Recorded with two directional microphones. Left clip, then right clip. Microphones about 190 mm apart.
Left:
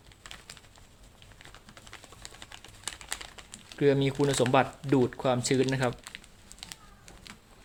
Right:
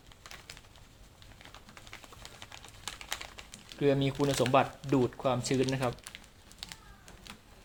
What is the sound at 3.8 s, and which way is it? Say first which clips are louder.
Speech: left 3 dB; 55° left (ahead or behind).